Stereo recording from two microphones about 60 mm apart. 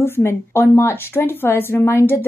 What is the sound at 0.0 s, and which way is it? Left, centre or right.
Speech, left.